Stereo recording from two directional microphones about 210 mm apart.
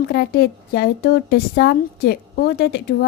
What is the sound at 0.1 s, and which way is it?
A woman's voice, 50° left (ahead or behind).